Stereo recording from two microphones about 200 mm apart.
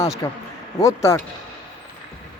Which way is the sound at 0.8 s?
15° left (ahead or behind).